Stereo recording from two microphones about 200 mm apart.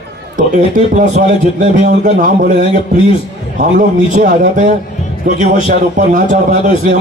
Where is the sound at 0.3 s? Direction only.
40° right (ahead or behind).